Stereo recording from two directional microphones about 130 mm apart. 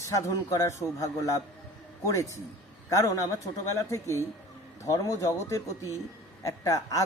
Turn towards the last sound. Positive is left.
turn(degrees=25)  # may be behind; listen again after turning